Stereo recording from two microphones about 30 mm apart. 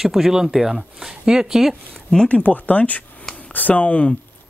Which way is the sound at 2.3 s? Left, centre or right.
Left.